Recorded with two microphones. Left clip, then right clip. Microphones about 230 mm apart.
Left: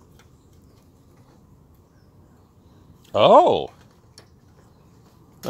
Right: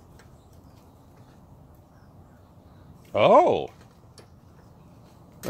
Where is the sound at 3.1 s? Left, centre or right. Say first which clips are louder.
Left 4 dB; left.